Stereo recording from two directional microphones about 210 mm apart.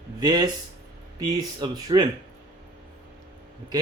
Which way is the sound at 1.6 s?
20° right (ahead or behind).